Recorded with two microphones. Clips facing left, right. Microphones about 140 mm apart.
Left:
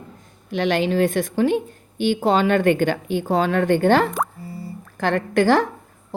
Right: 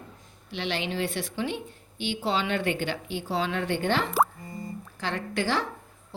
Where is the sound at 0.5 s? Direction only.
50° left (ahead or behind).